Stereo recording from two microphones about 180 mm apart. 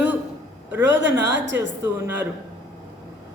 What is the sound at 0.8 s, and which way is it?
Speech, 85° right.